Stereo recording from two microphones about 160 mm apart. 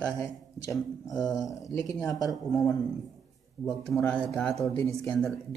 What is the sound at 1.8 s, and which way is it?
Speech, 20° left (ahead or behind).